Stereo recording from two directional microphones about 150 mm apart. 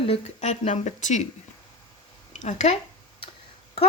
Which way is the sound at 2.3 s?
55° left (ahead or behind).